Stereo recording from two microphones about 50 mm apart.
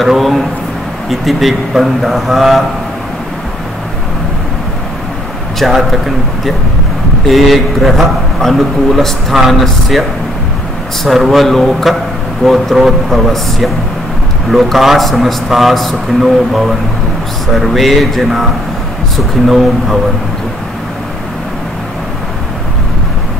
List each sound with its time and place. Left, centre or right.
0.0 s a man's voice: centre
5.6 s a man's voice: centre
11.2 s a man's voice: centre